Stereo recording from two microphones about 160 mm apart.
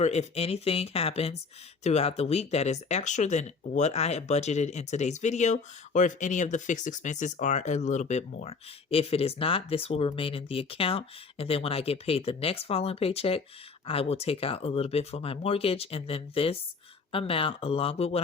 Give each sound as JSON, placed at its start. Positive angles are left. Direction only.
{"t": 0.0, "sound": "speech", "side_deg": 45}